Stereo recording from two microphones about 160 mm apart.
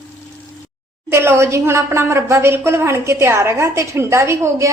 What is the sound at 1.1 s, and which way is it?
A woman's voice, 15° right (ahead or behind).